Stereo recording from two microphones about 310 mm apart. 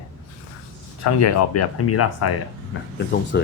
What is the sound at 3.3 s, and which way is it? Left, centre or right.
Speech, left.